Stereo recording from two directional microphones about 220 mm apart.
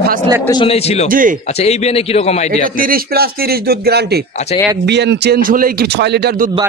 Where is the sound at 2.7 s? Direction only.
40° right (ahead or behind).